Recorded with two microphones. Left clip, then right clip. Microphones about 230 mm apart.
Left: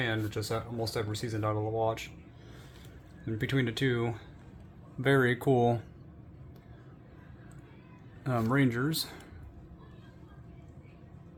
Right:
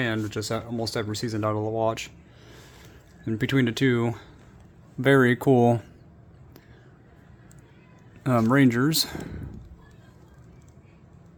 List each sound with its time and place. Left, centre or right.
0.0 s speech: right
8.2 s speech: right